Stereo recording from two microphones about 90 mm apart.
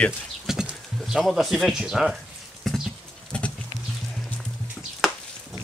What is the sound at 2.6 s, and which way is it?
Horse, 5° right (ahead or behind).